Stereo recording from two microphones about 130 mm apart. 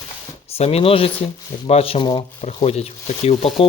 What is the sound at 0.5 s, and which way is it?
Speech, 50° left (ahead or behind).